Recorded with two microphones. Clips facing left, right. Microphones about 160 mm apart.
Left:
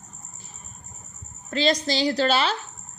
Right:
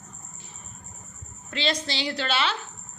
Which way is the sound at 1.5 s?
40° left (ahead or behind).